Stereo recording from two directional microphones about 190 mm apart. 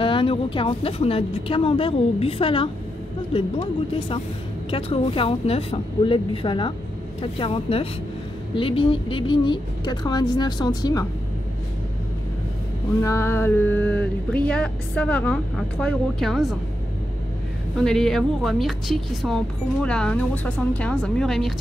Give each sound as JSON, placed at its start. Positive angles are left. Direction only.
{"t": 0.0, "sound": "a woman's voice", "side_deg": 30}
{"t": 4.6, "sound": "a woman's voice", "side_deg": 30}
{"t": 13.0, "sound": "speech", "side_deg": 15}
{"t": 17.7, "sound": "speech", "side_deg": 0}